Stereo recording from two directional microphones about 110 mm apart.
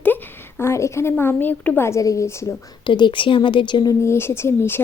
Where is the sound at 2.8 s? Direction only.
45° left (ahead or behind).